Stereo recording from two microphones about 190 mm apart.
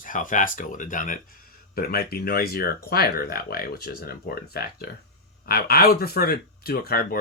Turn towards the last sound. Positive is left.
turn(degrees=50)  # may be behind; listen again after turning